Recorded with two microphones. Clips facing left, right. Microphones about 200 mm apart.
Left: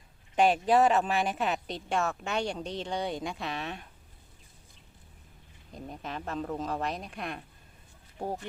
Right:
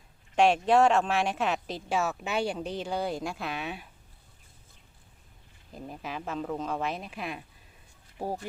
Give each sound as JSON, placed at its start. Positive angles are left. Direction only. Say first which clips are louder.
{"t": 0.3, "sound": "speech", "louder": "right 1 dB", "side_deg": 0}
{"t": 5.7, "sound": "speech", "louder": "right 1 dB", "side_deg": -5}